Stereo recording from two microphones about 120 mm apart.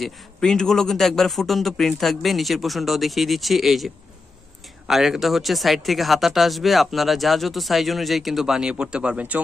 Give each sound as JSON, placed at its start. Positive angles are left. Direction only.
{"t": 0.0, "sound": "speech", "side_deg": 5}